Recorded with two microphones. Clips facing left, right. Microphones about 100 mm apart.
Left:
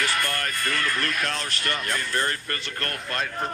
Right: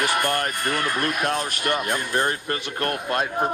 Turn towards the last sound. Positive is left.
turn(degrees=-10)  # may be behind; listen again after turning